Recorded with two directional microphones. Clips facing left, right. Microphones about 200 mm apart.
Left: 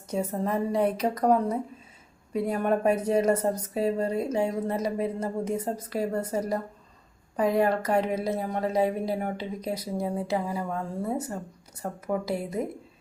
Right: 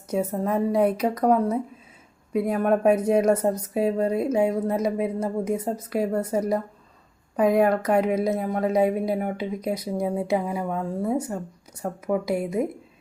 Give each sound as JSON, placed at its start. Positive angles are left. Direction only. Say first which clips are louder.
{"t": 0.1, "sound": "a woman's voice", "louder": "right 3 dB", "side_deg": -10}
{"t": 11.8, "sound": "a woman's voice", "louder": "right 4 dB", "side_deg": -10}